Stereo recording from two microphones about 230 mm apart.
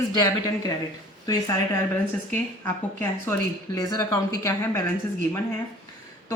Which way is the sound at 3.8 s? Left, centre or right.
Centre.